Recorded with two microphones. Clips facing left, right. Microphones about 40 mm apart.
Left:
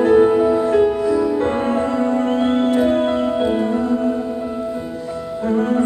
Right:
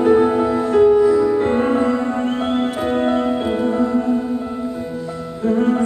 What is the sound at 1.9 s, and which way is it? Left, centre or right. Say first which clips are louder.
Music: left 1 dB; centre.